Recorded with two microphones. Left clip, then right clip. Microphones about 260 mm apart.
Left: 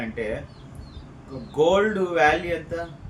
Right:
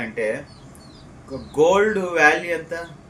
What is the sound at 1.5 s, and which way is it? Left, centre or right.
Speech, centre.